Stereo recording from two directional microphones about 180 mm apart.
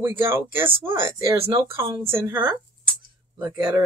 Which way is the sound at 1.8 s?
30° right (ahead or behind).